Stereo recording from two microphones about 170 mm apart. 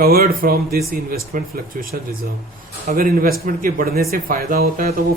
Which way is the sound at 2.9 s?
60° right (ahead or behind).